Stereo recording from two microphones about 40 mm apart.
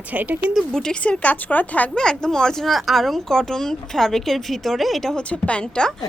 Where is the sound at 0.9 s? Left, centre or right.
Left.